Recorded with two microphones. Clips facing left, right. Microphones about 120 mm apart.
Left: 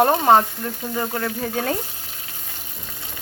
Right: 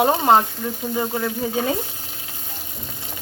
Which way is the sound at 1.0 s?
10° right (ahead or behind).